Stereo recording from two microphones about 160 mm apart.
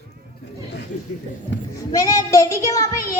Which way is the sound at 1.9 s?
20° left (ahead or behind).